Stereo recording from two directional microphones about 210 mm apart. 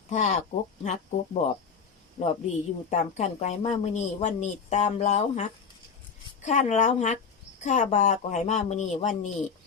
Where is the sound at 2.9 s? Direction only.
35° left (ahead or behind).